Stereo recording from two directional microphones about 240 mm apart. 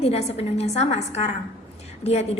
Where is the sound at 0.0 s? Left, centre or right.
Left.